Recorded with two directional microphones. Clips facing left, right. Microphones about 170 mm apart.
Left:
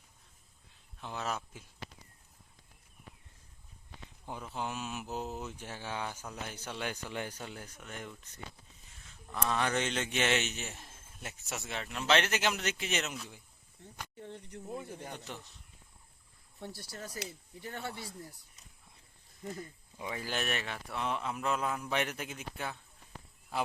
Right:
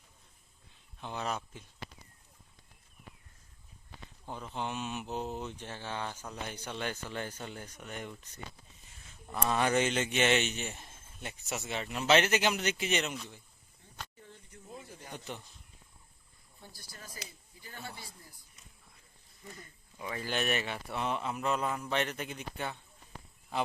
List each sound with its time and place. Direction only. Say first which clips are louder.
1.0 s a man's voice: right 1 dB; centre (ahead or behind)
4.3 s mantra: right 1 dB; 10° left (ahead or behind)
9.5 s a man's voice: right 4 dB; 10° right (ahead or behind)
14.2 s speech: left 9 dB; 65° left (ahead or behind)
16.6 s speech: left 9 dB; 75° left (ahead or behind)
20.0 s a man's voice: right 2 dB; 10° left (ahead or behind)